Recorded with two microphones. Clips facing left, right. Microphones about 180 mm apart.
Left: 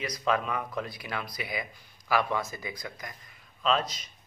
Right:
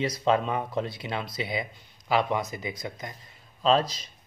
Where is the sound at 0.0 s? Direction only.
25° right (ahead or behind).